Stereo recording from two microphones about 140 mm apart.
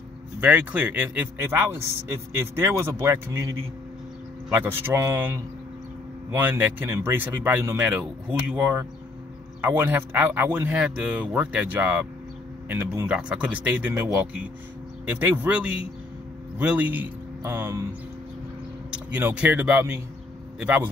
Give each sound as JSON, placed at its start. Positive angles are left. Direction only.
{"t": 0.4, "sound": "a man's voice", "side_deg": -10}
{"t": 19.1, "sound": "speech", "side_deg": -10}